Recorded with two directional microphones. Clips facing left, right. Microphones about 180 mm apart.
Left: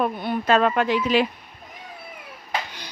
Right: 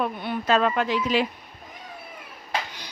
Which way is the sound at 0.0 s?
45° left (ahead or behind).